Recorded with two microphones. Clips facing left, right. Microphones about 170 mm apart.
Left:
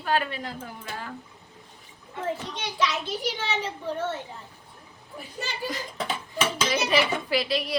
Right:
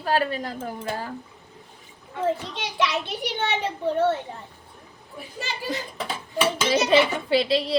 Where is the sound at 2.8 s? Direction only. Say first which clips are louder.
Right 1 dB; 65° right (ahead or behind).